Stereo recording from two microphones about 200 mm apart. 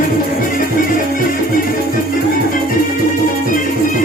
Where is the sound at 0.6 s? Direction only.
45° left (ahead or behind).